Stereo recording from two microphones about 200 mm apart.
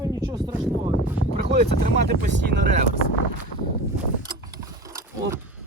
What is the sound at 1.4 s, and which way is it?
Speech, 50° right (ahead or behind).